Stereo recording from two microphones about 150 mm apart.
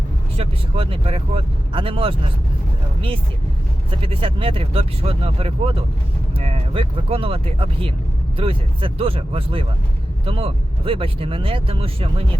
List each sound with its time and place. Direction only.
0.3 s speech: 40° right (ahead or behind)
4.0 s speech: 35° right (ahead or behind)